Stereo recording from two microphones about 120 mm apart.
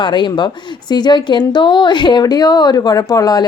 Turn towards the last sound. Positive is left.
turn(degrees=30)  # may be behind; listen again after turning